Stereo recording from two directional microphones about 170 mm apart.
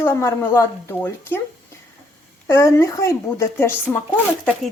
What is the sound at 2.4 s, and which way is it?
Speech, 15° left (ahead or behind).